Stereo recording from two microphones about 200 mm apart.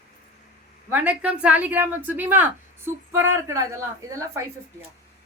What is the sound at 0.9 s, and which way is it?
Speech, 10° right (ahead or behind).